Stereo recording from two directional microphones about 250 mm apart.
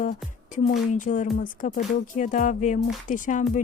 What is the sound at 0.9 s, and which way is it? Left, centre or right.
Music, left.